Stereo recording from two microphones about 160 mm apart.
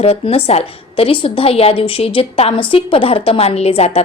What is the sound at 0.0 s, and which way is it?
A woman's voice, 40° left (ahead or behind).